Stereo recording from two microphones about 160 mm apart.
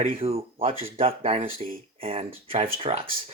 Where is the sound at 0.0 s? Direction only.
40° right (ahead or behind).